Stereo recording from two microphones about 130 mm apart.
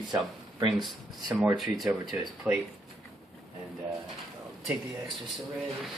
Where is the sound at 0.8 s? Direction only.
Centre (ahead or behind).